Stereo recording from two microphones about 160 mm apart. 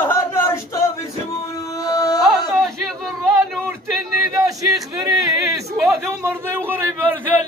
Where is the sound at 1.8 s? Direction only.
20° left (ahead or behind).